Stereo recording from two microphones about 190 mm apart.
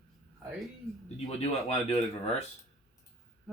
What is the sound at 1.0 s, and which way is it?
Speech, 35° left (ahead or behind).